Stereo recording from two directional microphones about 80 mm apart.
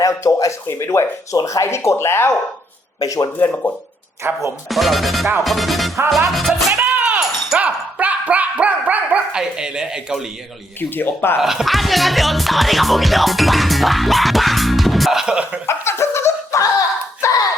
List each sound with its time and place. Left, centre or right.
0.0 s speech: left
0.7 s speech: left
3.0 s speech: left
3.3 s speech: left
4.2 s speech: right
4.7 s music: centre
6.8 s a sound: centre
7.2 s dog: centre
9.4 s speech: centre
10.8 s speech: left
11.3 s music: centre
15.6 s a sound: left